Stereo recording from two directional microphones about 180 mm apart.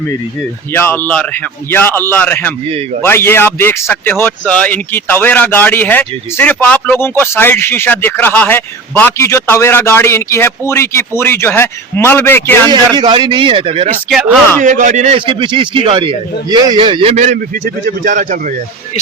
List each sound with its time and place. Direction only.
0.7 s a man's voice: 10° left (ahead or behind)
12.7 s a man's voice: 25° right (ahead or behind)
14.6 s a man's voice: 45° right (ahead or behind)